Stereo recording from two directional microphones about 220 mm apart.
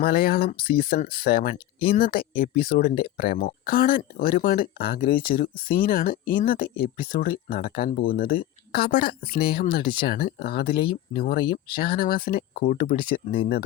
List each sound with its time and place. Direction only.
0.0 s speech: 45° left (ahead or behind)